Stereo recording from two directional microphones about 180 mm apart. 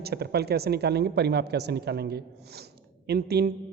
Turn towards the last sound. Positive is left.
turn(degrees=-60)  # may be behind; listen again after turning